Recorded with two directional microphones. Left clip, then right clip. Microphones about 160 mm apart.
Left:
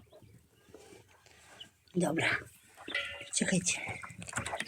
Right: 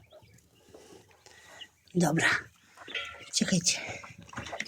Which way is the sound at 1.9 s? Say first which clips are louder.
Right 4 dB; 45° right (ahead or behind).